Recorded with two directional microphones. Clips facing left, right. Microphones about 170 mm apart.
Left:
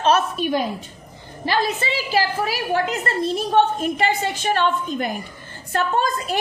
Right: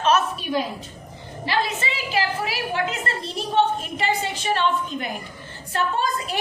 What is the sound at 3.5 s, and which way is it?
A woman's voice, 50° left (ahead or behind).